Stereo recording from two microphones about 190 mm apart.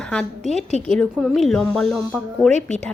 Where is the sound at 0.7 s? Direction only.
35° right (ahead or behind).